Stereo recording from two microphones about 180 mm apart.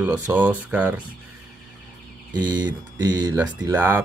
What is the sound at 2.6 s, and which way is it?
Mantra, 20° right (ahead or behind).